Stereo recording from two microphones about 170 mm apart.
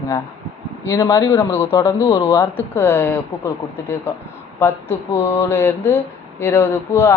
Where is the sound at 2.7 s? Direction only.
15° left (ahead or behind).